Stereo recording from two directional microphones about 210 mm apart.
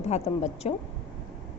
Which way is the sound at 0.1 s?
30° left (ahead or behind).